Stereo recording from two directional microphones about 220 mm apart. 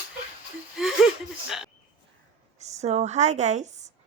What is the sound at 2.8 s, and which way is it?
Speech, 30° right (ahead or behind).